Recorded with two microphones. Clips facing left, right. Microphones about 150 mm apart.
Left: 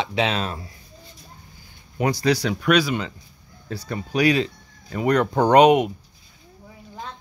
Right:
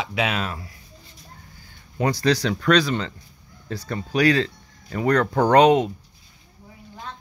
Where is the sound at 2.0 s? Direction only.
10° left (ahead or behind).